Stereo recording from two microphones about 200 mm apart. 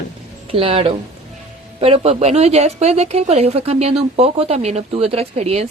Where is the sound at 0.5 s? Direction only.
30° right (ahead or behind).